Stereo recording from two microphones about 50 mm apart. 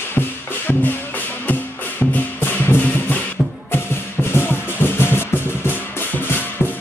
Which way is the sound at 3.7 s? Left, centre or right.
Left.